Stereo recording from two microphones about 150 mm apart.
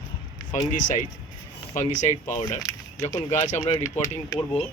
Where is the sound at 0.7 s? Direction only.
60° left (ahead or behind).